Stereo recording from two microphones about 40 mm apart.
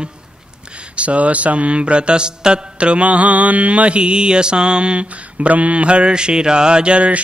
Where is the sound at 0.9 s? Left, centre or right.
Right.